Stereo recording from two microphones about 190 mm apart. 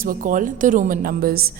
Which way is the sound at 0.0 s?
45° right (ahead or behind).